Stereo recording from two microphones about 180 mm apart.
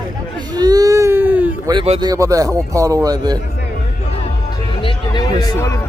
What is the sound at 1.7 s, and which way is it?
A man's voice, 25° right (ahead or behind).